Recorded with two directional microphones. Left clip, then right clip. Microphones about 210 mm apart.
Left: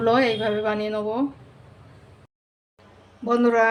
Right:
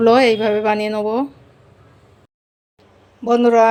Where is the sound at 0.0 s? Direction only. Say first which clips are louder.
Right 7 dB; 45° right (ahead or behind).